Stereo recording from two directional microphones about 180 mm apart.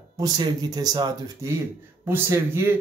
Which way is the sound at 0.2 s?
20° right (ahead or behind).